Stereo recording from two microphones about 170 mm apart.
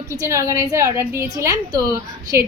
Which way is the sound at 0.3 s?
15° right (ahead or behind).